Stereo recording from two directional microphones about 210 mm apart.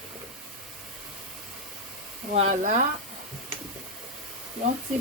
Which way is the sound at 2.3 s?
35° right (ahead or behind).